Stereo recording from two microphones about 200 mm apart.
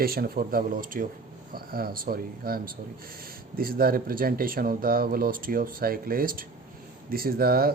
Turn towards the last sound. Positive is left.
turn(degrees=-50)  # may be behind; listen again after turning